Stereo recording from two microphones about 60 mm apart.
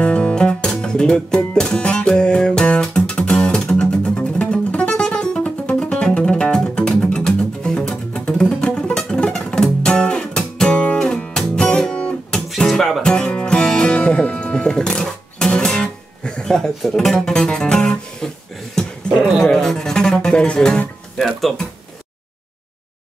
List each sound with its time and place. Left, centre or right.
0.0 s music: centre
12.5 s music: centre
13.0 s music: centre
19.4 s music: centre
21.2 s music: centre